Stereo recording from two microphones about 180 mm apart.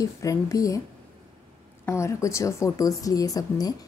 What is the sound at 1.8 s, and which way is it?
A woman's voice, 15° left (ahead or behind).